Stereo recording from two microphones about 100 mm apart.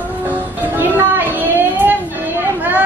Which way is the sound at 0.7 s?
20° right (ahead or behind).